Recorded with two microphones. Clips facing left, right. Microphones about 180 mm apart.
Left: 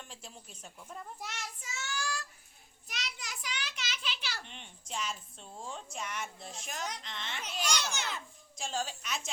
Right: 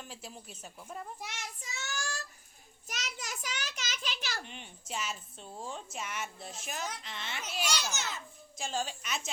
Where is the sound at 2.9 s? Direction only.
45° right (ahead or behind).